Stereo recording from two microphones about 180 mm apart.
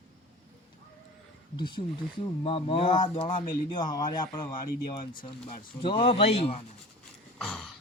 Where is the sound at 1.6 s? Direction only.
25° left (ahead or behind).